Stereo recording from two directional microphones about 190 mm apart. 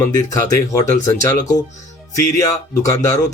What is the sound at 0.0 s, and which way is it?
Speech, 15° left (ahead or behind).